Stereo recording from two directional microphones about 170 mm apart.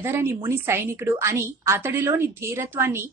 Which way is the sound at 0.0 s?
15° right (ahead or behind).